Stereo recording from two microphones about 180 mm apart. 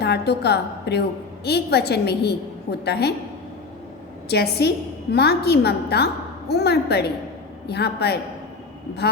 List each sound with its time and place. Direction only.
0.0 s a woman's voice: 65° left (ahead or behind)
4.3 s a woman's voice: 65° left (ahead or behind)